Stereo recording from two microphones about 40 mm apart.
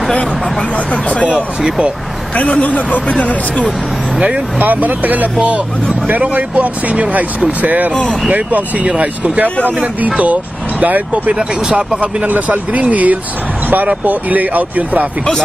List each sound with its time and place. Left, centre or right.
2.3 s speech: left
4.6 s speech: right
5.4 s speech: right
7.9 s speech: centre
8.3 s speech: right
8.8 s speech: right
11.3 s speech: centre
12.3 s speech: right